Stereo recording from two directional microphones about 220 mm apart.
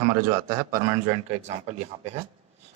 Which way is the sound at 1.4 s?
30° right (ahead or behind).